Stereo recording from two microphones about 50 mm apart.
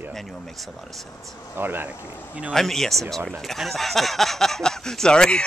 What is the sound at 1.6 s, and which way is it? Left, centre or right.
Speech, right.